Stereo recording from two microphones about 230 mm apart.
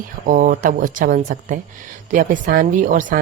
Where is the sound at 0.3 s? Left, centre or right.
Right.